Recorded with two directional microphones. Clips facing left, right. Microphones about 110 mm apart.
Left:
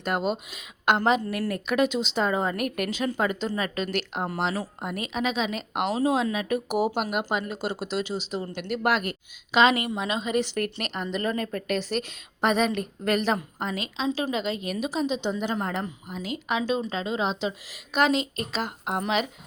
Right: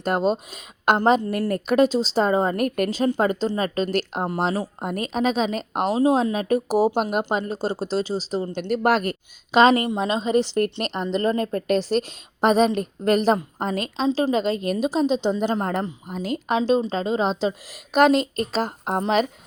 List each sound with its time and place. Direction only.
0.0 s speech: 35° right (ahead or behind)